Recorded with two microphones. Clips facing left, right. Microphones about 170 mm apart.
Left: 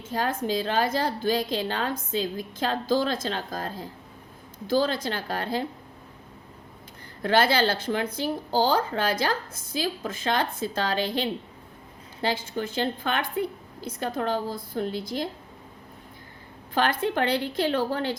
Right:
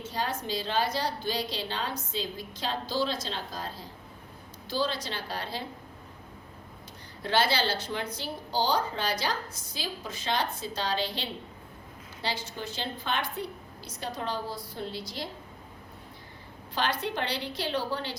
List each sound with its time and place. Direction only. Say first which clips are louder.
0.0 s a woman's voice: left 5 dB; 50° left (ahead or behind)
7.2 s a woman's voice: left 5 dB; 50° left (ahead or behind)
16.7 s a woman's voice: left 6 dB; 50° left (ahead or behind)